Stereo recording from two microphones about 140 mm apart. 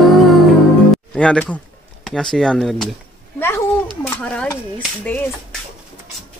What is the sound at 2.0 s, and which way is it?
Speech, 5° left (ahead or behind).